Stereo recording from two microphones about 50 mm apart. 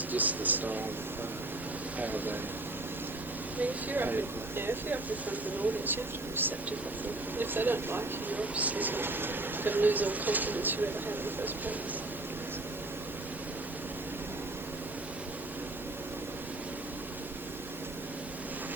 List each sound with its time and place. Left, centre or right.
0.1 s speech: right
2.0 s speech: right
3.6 s speech: right
8.3 s speech: right